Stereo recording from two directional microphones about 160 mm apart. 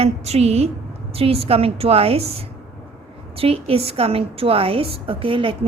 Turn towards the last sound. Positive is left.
turn(degrees=-35)  # may be behind; listen again after turning